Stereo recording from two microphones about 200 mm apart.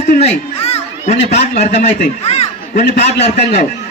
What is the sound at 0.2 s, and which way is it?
A man's voice, 30° left (ahead or behind).